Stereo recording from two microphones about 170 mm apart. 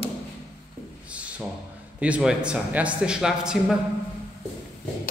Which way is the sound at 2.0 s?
5° right (ahead or behind).